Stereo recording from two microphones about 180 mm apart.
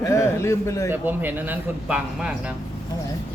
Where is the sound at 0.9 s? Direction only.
10° right (ahead or behind).